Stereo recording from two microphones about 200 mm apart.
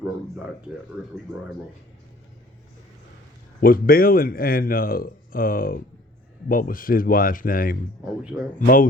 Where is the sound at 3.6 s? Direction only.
45° left (ahead or behind).